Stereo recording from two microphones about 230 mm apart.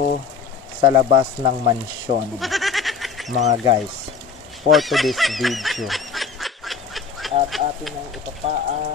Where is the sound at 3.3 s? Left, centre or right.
Right.